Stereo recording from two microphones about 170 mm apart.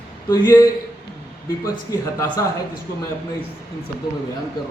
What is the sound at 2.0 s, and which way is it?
Speech, 20° left (ahead or behind).